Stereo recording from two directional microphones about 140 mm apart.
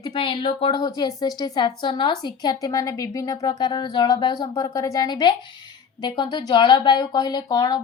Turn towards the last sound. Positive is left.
turn(degrees=30)  # may be behind; listen again after turning